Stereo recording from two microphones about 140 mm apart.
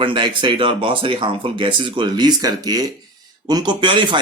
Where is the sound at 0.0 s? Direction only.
35° right (ahead or behind).